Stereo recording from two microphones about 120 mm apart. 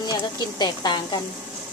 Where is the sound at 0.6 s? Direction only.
35° left (ahead or behind).